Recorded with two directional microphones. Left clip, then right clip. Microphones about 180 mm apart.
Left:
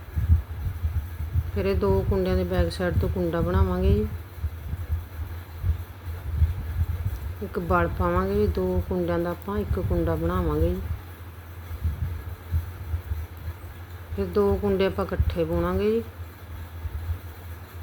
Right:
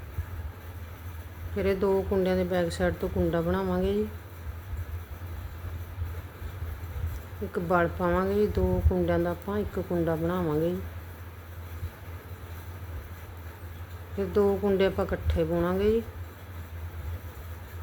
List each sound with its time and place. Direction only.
1.5 s speech: 5° left (ahead or behind)
7.5 s speech: 5° left (ahead or behind)
14.2 s speech: 5° left (ahead or behind)